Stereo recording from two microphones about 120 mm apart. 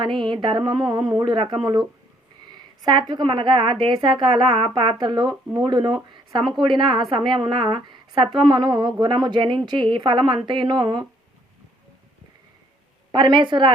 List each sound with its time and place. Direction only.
0.0 s speech: 45° right (ahead or behind)
13.1 s speech: 40° right (ahead or behind)